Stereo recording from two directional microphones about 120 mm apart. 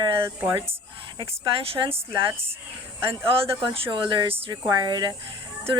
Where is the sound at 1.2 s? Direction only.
50° right (ahead or behind).